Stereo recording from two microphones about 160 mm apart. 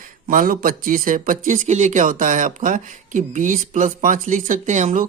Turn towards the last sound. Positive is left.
turn(degrees=-50)  # may be behind; listen again after turning